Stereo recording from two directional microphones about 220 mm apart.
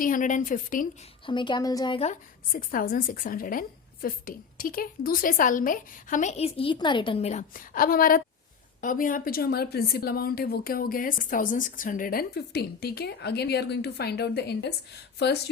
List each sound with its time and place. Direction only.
0.0 s a woman's voice: 35° left (ahead or behind)
1.2 s a woman's voice: 20° left (ahead or behind); by 14.7 s 50° left (ahead or behind)